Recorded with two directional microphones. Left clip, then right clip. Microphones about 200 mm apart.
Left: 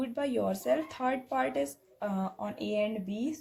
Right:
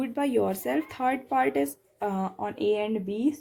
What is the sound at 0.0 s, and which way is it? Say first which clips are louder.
Speech: right 5 dB; 35° right (ahead or behind).